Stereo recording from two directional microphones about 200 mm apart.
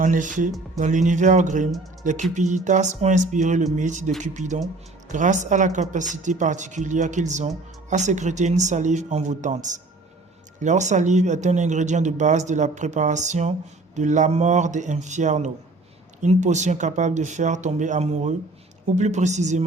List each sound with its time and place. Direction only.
0.0 s speech: 40° right (ahead or behind)